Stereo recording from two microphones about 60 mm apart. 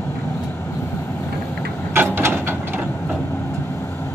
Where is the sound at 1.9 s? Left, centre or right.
Right.